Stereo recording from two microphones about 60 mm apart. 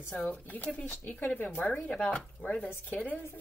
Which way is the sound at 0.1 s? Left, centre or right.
Left.